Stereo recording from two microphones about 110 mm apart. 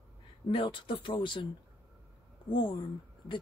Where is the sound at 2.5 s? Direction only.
50° left (ahead or behind).